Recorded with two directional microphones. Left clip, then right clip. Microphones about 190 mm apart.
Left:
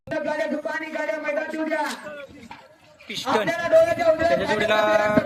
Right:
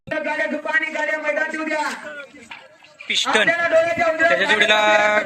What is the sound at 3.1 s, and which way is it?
Speech, centre (ahead or behind).